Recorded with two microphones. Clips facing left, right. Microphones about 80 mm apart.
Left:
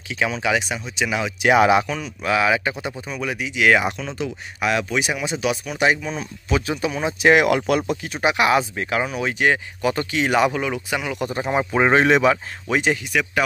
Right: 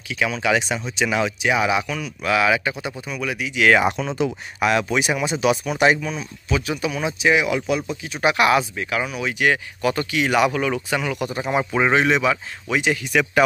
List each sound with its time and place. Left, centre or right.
0.1 s speech: left
0.5 s speech: centre
1.4 s speech: left
1.9 s speech: left
3.9 s speech: centre
4.6 s speech: centre
6.1 s speech: left
7.2 s speech: left
8.2 s speech: left
8.7 s speech: left
9.5 s speech: left
11.1 s speech: left
11.9 s speech: left
13.1 s speech: centre